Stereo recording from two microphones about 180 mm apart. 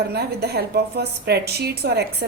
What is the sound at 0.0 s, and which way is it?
A woman's voice, 60° right (ahead or behind).